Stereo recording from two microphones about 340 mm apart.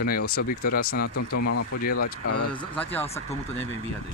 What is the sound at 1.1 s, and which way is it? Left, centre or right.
Speech, left.